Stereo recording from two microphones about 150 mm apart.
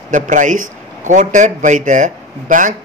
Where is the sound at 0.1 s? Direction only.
60° right (ahead or behind).